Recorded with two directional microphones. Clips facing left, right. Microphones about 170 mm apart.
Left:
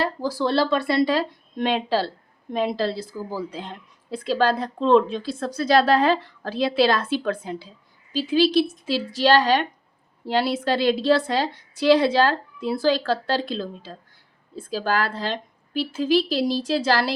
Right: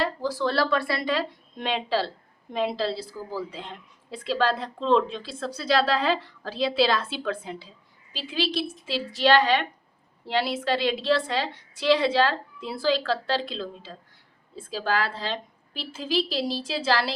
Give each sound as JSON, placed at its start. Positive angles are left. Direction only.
{"t": 0.0, "sound": "speech", "side_deg": 40}
{"t": 0.5, "sound": "speech", "side_deg": 20}
{"t": 1.1, "sound": "a woman's voice", "side_deg": 45}